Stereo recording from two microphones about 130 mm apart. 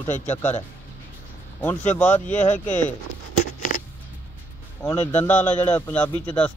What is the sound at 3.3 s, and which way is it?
Patter, 80° left.